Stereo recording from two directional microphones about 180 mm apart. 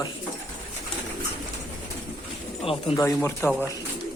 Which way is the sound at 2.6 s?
30° left (ahead or behind).